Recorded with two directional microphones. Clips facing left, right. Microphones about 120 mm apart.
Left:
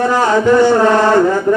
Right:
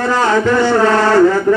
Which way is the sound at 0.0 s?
15° left (ahead or behind).